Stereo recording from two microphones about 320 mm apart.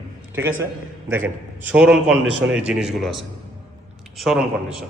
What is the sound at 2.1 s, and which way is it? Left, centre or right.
Speech, right.